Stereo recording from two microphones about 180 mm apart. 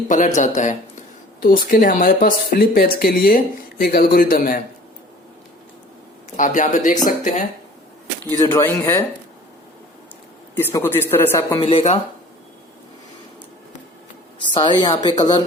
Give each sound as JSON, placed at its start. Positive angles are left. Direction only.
{"t": 0.1, "sound": "speech", "side_deg": 40}
{"t": 6.3, "sound": "speech", "side_deg": 45}
{"t": 8.4, "sound": "a man's voice", "side_deg": 15}
{"t": 10.5, "sound": "a man's voice", "side_deg": 10}
{"t": 11.5, "sound": "speech", "side_deg": 30}
{"t": 14.4, "sound": "speech", "side_deg": 25}